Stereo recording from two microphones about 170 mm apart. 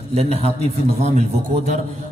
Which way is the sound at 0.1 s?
35° right (ahead or behind).